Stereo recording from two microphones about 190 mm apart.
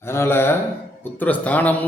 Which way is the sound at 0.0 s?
15° left (ahead or behind).